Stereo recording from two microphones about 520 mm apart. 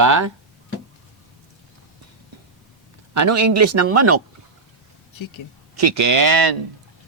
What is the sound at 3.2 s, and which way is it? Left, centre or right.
Speech, right.